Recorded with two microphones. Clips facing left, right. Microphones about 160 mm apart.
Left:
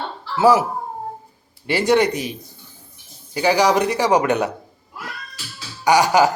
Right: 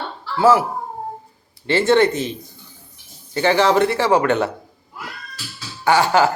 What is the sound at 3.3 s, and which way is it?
Speech, 10° left (ahead or behind).